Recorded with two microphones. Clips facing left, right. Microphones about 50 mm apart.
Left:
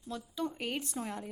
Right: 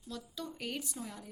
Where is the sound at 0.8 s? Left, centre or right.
Left.